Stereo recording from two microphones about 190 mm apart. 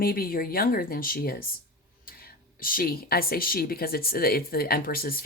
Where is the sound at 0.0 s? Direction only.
50° left (ahead or behind).